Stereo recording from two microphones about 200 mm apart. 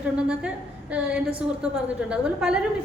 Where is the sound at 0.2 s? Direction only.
5° right (ahead or behind).